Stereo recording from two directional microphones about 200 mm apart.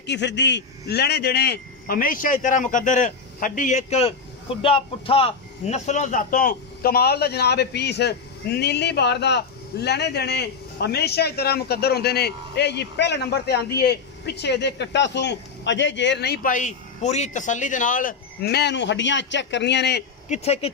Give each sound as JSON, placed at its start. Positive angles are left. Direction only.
{"t": 0.0, "sound": "a man's voice", "side_deg": 60}
{"t": 20.2, "sound": "speech", "side_deg": 30}